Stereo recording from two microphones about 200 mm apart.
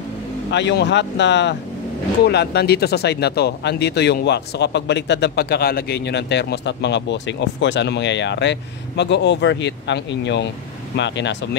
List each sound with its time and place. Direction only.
0.5 s speech: 60° left (ahead or behind)